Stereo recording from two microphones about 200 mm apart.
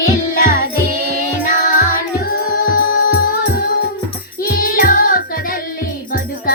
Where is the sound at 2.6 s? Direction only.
50° left (ahead or behind).